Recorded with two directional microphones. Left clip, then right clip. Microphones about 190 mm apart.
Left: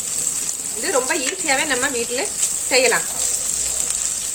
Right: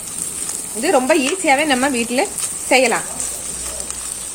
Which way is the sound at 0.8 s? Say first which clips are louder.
Right 6 dB; 35° right (ahead or behind).